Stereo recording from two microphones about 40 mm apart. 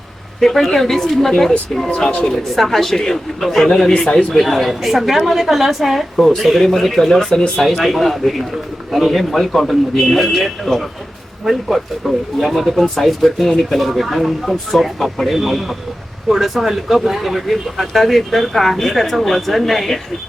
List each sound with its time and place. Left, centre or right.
0.3 s speech: centre
4.3 s speech: centre